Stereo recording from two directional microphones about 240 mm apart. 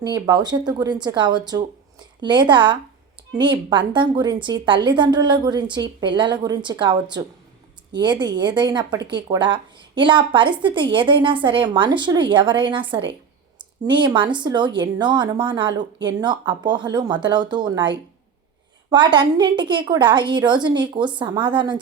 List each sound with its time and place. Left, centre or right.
0.0 s a woman's voice: centre